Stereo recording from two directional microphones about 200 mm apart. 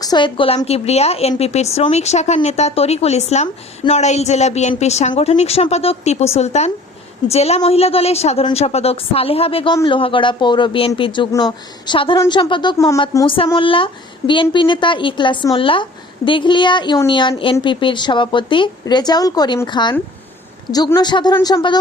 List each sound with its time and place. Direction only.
0.0 s a woman's voice: 20° left (ahead or behind)